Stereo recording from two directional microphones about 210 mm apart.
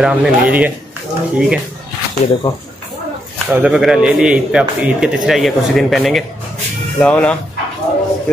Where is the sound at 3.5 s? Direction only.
5° right (ahead or behind).